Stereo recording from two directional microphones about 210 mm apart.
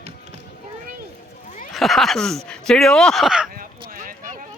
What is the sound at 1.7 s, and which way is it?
Speech, centre (ahead or behind).